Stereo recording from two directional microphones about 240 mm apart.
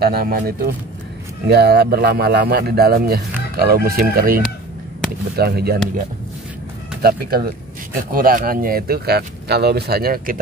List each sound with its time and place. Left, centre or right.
0.0 s speech: right
7.0 s speech: right